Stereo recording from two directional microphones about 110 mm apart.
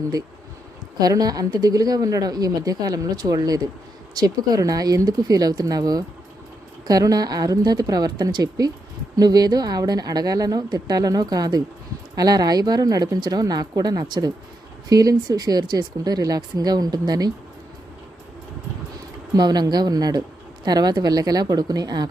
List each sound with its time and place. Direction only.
0.9 s a woman's voice: 35° right (ahead or behind)
19.4 s a woman's voice: 40° right (ahead or behind)